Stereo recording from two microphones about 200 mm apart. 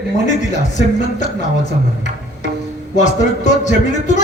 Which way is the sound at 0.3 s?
35° left (ahead or behind).